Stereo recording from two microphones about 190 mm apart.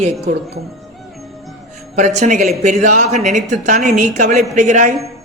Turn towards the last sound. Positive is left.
turn(degrees=-40)  # may be behind; listen again after turning